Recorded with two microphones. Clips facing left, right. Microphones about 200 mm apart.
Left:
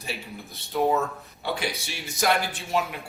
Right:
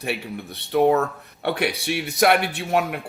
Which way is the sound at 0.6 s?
65° right (ahead or behind).